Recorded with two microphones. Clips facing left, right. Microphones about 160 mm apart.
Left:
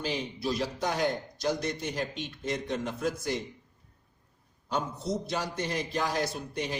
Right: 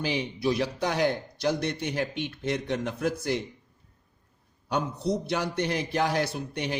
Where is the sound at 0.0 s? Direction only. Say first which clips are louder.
Right 4 dB; 65° right (ahead or behind).